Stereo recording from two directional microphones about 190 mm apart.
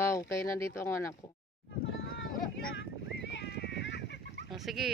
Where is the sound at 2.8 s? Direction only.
65° left (ahead or behind).